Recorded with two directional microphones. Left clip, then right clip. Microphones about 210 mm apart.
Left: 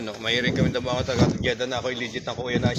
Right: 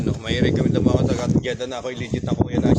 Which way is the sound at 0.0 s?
Centre (ahead or behind).